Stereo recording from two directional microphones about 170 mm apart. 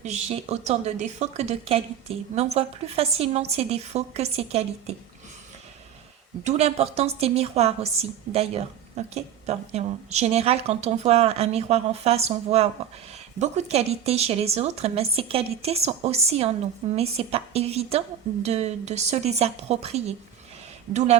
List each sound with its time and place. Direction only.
0.0 s a woman's voice: 40° right (ahead or behind)
6.4 s a woman's voice: 40° right (ahead or behind)